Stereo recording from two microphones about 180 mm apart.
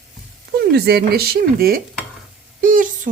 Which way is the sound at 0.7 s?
60° right (ahead or behind).